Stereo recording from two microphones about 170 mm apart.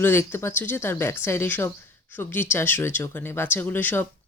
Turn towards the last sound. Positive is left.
turn(degrees=10)  # may be behind; listen again after turning